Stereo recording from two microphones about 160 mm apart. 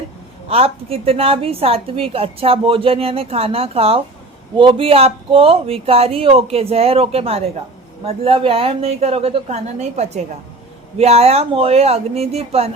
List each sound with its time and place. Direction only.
0.4 s a woman's voice: 40° right (ahead or behind)